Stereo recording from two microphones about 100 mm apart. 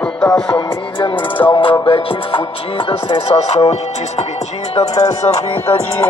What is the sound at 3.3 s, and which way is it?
Speech, 85° left.